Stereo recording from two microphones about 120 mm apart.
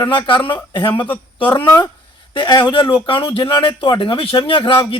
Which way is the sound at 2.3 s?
40° left (ahead or behind).